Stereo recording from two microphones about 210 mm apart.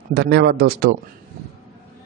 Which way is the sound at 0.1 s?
50° right (ahead or behind).